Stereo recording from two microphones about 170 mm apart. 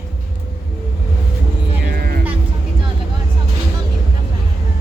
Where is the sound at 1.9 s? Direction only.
60° right (ahead or behind).